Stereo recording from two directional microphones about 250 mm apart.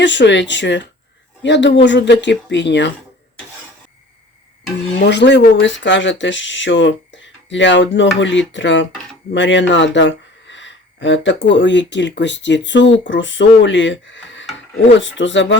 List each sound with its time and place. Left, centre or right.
0.0 s speech: left
4.9 s speech: left